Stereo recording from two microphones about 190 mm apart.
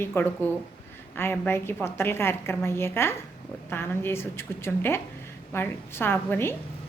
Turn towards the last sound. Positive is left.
turn(degrees=10)  # may be behind; listen again after turning